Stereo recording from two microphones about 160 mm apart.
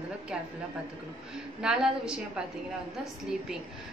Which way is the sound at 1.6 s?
5° right (ahead or behind).